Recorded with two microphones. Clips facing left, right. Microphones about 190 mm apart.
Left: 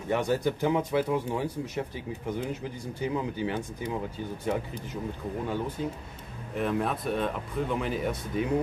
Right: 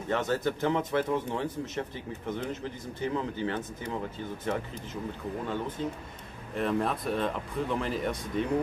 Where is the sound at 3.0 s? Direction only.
10° left (ahead or behind).